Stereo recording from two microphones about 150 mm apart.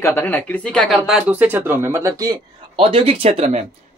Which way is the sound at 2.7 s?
40° right (ahead or behind).